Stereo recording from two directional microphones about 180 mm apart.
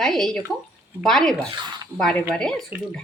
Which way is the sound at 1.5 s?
25° right (ahead or behind).